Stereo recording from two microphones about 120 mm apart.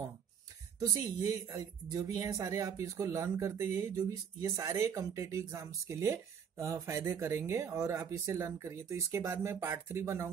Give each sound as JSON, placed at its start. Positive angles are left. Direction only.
{"t": 1.2, "sound": "speech", "side_deg": -30}